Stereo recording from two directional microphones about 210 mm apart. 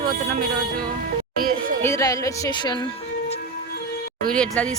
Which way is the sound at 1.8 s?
15° left (ahead or behind).